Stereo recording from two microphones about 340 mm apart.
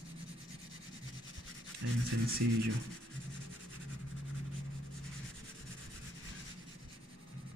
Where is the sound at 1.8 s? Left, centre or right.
Right.